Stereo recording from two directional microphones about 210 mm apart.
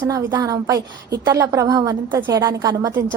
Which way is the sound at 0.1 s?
15° right (ahead or behind).